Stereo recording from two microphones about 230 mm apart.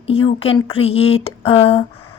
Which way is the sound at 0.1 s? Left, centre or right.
Left.